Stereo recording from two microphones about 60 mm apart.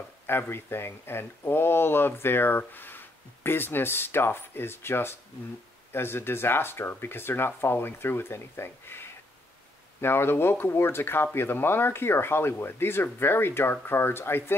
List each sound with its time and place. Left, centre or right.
0.3 s speech: left